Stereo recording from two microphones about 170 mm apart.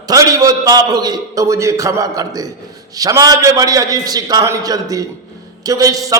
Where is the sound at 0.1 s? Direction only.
20° right (ahead or behind).